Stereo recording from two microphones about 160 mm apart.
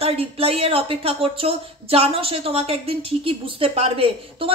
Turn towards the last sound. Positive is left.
turn(degrees=-35)  # may be behind; listen again after turning